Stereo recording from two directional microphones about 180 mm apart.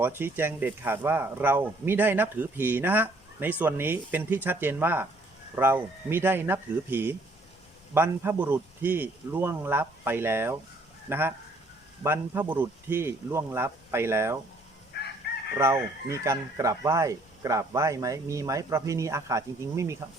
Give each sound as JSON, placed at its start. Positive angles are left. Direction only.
{"t": 0.0, "sound": "speech", "side_deg": -10}
{"t": 14.9, "sound": "chicken", "side_deg": 65}
{"t": 15.5, "sound": "speech", "side_deg": -15}